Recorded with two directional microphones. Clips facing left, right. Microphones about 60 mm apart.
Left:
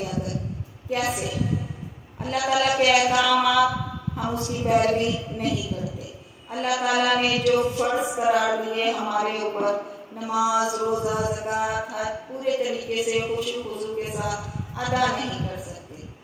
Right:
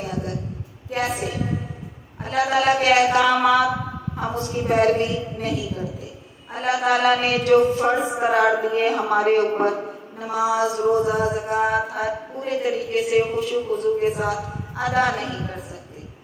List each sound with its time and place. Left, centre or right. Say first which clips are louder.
0.0 s a man's voice: right 1 dB; right
2.3 s speech: right 3 dB; right